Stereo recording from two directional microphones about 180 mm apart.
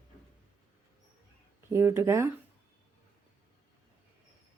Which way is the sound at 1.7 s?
15° right (ahead or behind).